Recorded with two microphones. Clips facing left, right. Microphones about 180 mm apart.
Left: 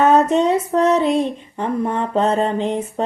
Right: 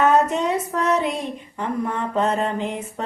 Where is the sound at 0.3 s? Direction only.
30° left (ahead or behind).